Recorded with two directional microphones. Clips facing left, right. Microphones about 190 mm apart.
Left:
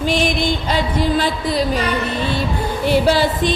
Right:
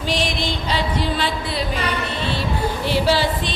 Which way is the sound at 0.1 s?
50° left (ahead or behind).